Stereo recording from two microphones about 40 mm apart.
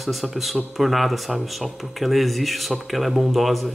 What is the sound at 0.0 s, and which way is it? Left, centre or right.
Speech, centre.